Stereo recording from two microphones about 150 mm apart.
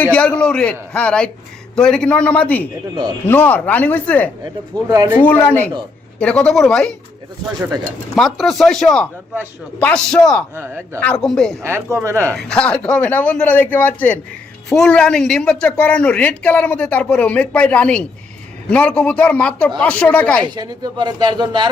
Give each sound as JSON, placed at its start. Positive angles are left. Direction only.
{"t": 0.0, "sound": "speech", "side_deg": 10}
{"t": 4.7, "sound": "speech", "side_deg": -25}
{"t": 5.2, "sound": "speech", "side_deg": 10}
{"t": 8.1, "sound": "speech", "side_deg": 0}
{"t": 10.5, "sound": "speech", "side_deg": -20}
{"t": 11.0, "sound": "speech", "side_deg": 5}
{"t": 11.6, "sound": "speech", "side_deg": -15}
{"t": 12.4, "sound": "speech", "side_deg": 5}
{"t": 20.4, "sound": "speech", "side_deg": -25}